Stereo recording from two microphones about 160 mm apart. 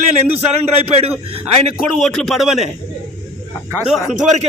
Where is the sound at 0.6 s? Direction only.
40° right (ahead or behind).